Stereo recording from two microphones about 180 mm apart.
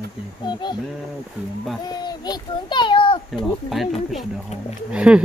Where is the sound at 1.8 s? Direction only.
20° left (ahead or behind).